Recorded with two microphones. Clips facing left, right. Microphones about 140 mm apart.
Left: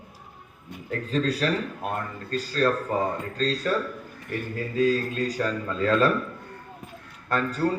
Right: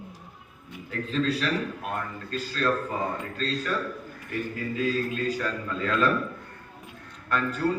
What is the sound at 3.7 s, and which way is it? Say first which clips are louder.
Speech: left 5 dB; 30° left (ahead or behind).